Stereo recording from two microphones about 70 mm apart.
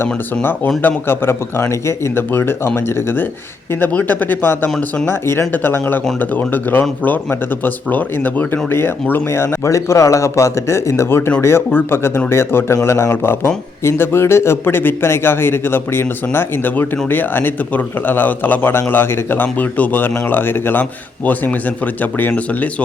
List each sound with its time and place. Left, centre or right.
0.8 s speech: left
5.0 s speech: left
22.0 s speech: left